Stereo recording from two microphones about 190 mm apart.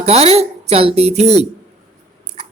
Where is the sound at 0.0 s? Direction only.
35° right (ahead or behind).